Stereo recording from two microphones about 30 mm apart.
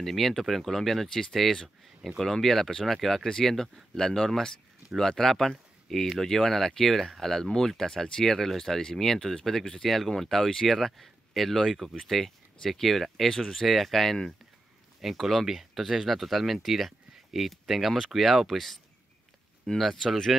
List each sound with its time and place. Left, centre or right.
0.0 s speech: centre
3.3 s speech: centre
19.7 s speech: left